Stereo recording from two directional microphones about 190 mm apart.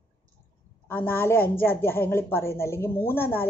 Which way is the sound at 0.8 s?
10° left (ahead or behind).